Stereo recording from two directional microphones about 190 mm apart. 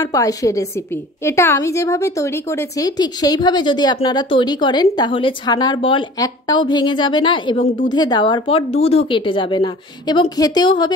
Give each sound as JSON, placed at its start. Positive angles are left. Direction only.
{"t": 0.0, "sound": "a woman's voice", "side_deg": 20}